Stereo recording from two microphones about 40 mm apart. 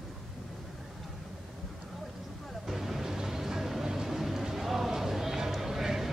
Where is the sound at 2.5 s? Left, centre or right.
Centre.